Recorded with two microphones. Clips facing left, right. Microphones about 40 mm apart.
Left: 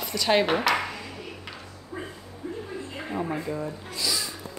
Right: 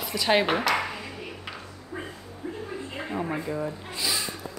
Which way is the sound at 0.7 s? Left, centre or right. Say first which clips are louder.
Left 1 dB; centre.